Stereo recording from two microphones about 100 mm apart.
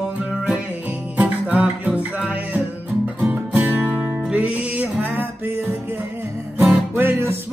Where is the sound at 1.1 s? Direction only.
15° right (ahead or behind).